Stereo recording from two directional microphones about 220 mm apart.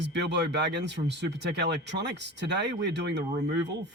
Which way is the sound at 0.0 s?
50° right (ahead or behind).